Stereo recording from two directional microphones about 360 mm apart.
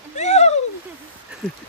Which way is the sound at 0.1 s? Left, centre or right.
Centre.